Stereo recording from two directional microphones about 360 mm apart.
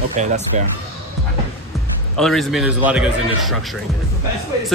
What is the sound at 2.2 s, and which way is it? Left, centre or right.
Speech, centre.